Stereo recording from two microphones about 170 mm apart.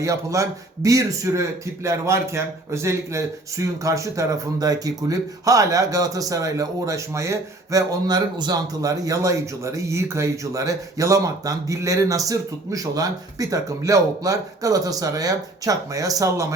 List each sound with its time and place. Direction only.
0.0 s a man's voice: 20° right (ahead or behind)